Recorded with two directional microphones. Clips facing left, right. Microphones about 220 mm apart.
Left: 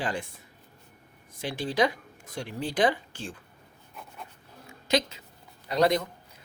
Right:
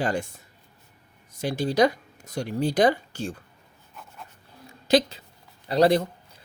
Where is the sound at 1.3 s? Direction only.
45° right (ahead or behind).